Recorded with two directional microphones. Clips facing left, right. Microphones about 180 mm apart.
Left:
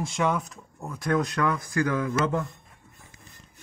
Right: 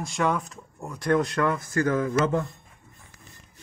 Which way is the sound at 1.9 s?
30° right (ahead or behind).